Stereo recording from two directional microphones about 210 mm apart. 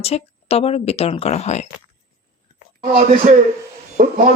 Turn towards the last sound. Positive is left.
turn(degrees=-40)  # may be behind; listen again after turning